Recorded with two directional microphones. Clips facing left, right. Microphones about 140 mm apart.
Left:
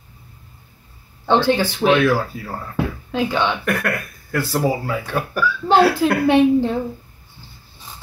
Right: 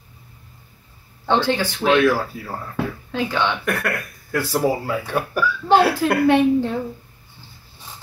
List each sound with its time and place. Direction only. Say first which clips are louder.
1.2 s speech: left 3 dB; 20° left (ahead or behind)
4.3 s speech: even; 5° right (ahead or behind)
6.2 s a woman's voice: left 2 dB; 20° left (ahead or behind)